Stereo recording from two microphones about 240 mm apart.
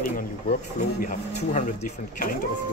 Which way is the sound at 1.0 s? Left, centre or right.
Left.